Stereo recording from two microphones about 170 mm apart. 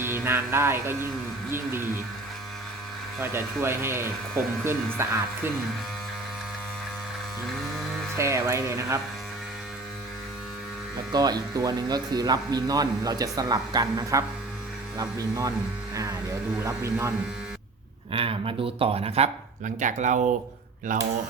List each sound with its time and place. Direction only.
0.0 s music: 15° right (ahead or behind)
3.2 s speech: 15° right (ahead or behind)
8.2 s speech: 15° right (ahead or behind)
11.1 s speech: 25° right (ahead or behind)
16.6 s speech: 15° right (ahead or behind)
18.1 s speech: 35° right (ahead or behind); by 21.0 s 50° right (ahead or behind)